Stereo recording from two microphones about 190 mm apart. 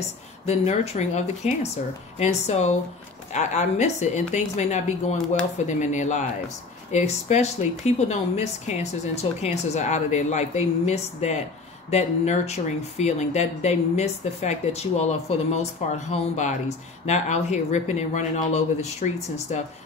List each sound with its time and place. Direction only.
0.5 s speech: 35° left (ahead or behind)
5.1 s speech: 5° left (ahead or behind)
5.7 s speech: 40° left (ahead or behind)